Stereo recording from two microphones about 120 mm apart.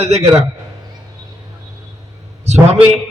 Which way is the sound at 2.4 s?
65° right (ahead or behind).